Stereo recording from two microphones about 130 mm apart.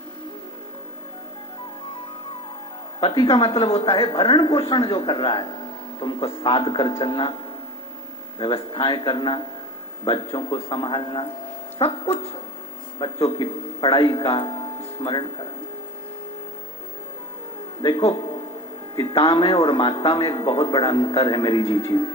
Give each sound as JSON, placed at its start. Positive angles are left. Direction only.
{"t": 3.0, "sound": "a woman's voice", "side_deg": 40}
{"t": 8.4, "sound": "a woman's voice", "side_deg": 40}
{"t": 13.0, "sound": "a man's voice", "side_deg": 40}
{"t": 17.8, "sound": "a woman's voice", "side_deg": 35}
{"t": 21.6, "sound": "speech", "side_deg": 50}